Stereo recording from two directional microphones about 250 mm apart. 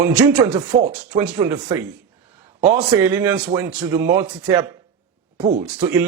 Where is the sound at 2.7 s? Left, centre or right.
Centre.